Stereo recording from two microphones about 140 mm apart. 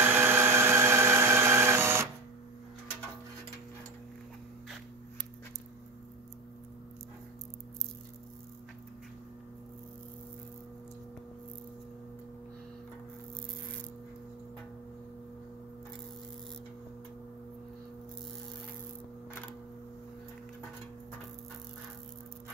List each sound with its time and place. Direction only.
0.0 s blender: 15° right (ahead or behind)